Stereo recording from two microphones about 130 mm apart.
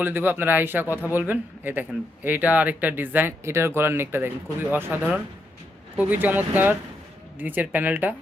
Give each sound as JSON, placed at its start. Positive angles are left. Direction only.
{"t": 0.0, "sound": "speech", "side_deg": -15}
{"t": 6.0, "sound": "speech", "side_deg": -15}